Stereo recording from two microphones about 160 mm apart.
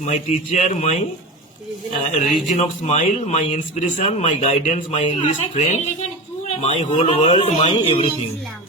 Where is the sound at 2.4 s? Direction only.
45° left (ahead or behind).